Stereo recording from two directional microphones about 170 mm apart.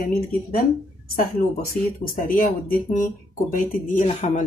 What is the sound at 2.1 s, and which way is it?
Speech, 55° left (ahead or behind).